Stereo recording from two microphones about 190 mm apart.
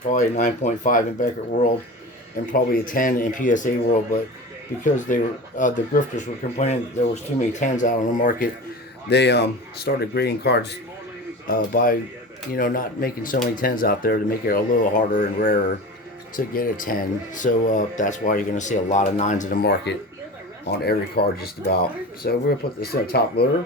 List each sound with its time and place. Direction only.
0.1 s speech: 40° left (ahead or behind)
4.8 s speech: 40° left (ahead or behind)
9.0 s speech: 65° left (ahead or behind)
11.4 s speech: 45° left (ahead or behind)
16.6 s speech: 45° left (ahead or behind)
19.6 s speech: 60° left (ahead or behind)